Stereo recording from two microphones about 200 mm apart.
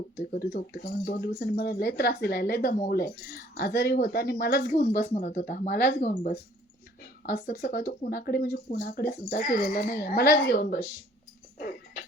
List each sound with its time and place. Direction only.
0.3 s speech: 50° left (ahead or behind)